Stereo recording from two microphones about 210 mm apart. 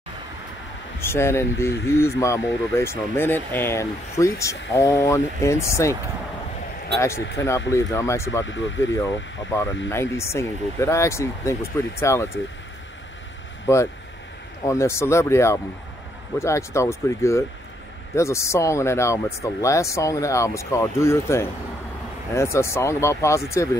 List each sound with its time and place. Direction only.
0.9 s speech: 10° left (ahead or behind)
7.3 s speech: 15° left (ahead or behind)
8.5 s speech: 60° left (ahead or behind)
8.9 s speech: 15° left (ahead or behind)
14.7 s speech: 15° left (ahead or behind)